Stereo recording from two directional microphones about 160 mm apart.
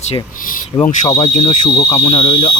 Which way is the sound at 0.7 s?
20° left (ahead or behind).